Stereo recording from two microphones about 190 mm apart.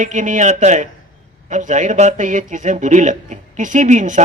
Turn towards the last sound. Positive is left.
turn(degrees=-40)  # may be behind; listen again after turning